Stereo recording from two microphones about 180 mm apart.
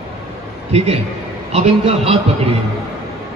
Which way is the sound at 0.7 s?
35° right (ahead or behind).